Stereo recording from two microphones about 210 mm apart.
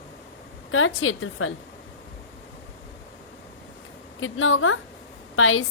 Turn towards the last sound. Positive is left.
turn(degrees=70)  # may be behind; listen again after turning